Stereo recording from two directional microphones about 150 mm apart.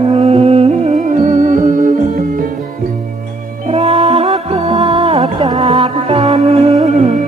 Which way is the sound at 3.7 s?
40° right (ahead or behind).